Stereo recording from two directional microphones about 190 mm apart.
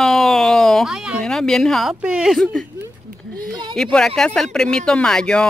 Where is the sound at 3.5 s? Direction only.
25° right (ahead or behind).